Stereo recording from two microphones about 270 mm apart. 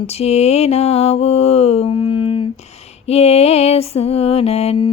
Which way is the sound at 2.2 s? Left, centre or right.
Centre.